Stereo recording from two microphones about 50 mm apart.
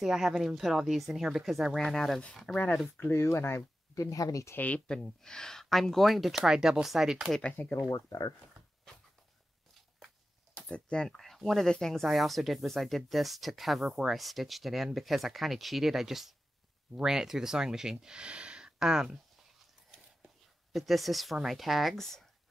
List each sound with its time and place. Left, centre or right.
0.0 s speech: centre
1.8 s speech: centre
2.5 s speech: left
3.0 s speech: left
4.6 s speech: left
4.8 s speech: centre
7.6 s speech: left
10.7 s speech: left
11.1 s speech: centre
13.8 s speech: centre
14.1 s speech: centre
20.7 s speech: centre